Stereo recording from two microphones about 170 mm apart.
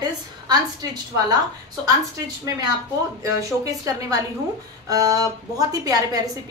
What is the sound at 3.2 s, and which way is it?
A woman's voice, 20° right (ahead or behind).